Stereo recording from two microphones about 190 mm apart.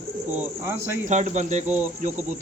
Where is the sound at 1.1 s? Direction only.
40° right (ahead or behind).